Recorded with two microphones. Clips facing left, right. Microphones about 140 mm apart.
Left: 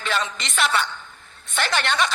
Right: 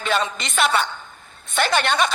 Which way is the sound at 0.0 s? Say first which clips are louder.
Right 3 dB; 20° right (ahead or behind).